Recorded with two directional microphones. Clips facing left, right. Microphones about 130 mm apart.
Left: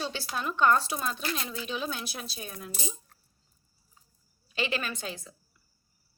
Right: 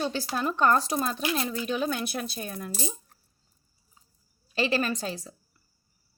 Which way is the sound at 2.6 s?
40° right (ahead or behind).